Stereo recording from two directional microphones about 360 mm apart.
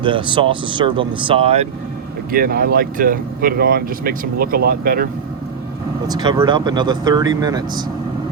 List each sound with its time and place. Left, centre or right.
0.0 s speech: centre
6.1 s speech: centre